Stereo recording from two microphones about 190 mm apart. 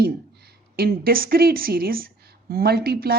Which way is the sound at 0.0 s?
55° right (ahead or behind).